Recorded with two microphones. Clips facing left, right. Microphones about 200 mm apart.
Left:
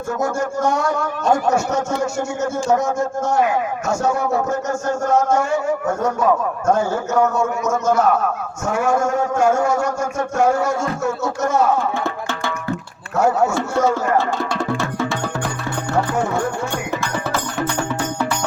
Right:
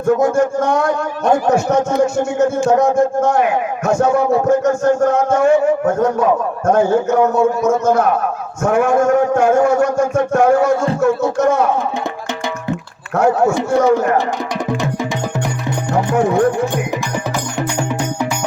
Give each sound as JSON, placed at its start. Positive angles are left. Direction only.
{"t": 0.2, "sound": "a man's voice", "side_deg": -55}
{"t": 13.1, "sound": "a man's voice", "side_deg": -55}
{"t": 13.7, "sound": "speech", "side_deg": -15}
{"t": 14.7, "sound": "music", "side_deg": -15}
{"t": 17.6, "sound": "music", "side_deg": -15}